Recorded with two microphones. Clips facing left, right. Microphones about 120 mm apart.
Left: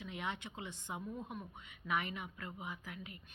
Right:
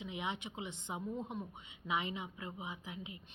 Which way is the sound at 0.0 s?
20° right (ahead or behind).